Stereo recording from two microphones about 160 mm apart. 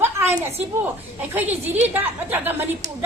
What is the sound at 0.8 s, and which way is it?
Speech, 10° right (ahead or behind).